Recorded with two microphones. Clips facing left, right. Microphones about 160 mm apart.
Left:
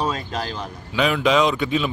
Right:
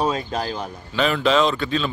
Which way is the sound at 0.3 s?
45° right (ahead or behind).